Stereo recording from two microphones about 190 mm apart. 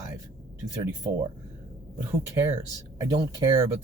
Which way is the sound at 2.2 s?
15° right (ahead or behind).